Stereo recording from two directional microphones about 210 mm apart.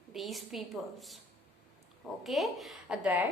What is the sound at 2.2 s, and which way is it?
A woman's voice, centre (ahead or behind).